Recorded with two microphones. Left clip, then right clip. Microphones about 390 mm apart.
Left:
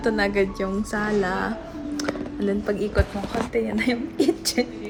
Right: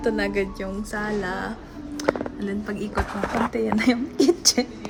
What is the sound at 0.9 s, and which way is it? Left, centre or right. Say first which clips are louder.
Speech: left 3 dB; left.